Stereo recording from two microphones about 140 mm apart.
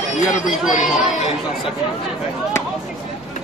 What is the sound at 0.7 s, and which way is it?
Speech, 60° left (ahead or behind).